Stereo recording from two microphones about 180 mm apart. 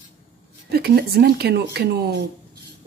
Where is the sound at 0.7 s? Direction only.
60° right (ahead or behind).